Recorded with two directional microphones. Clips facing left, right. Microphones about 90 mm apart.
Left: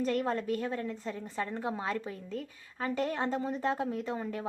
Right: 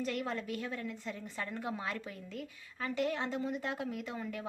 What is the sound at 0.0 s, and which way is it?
A woman's voice, 40° left (ahead or behind).